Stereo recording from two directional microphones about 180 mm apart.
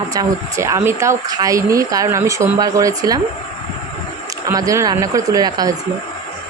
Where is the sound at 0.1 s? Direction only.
20° right (ahead or behind).